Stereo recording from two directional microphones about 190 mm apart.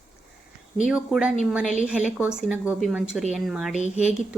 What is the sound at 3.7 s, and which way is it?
Speech, 35° left (ahead or behind).